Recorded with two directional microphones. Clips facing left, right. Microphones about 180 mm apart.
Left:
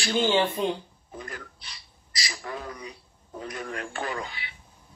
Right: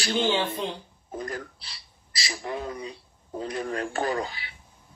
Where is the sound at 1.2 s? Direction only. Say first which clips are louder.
Right 6 dB; 40° right (ahead or behind).